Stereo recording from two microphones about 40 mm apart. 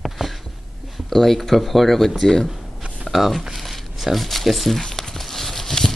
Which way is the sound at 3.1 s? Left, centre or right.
Centre.